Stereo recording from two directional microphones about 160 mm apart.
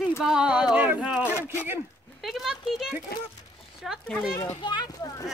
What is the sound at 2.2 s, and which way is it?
Speech, centre (ahead or behind).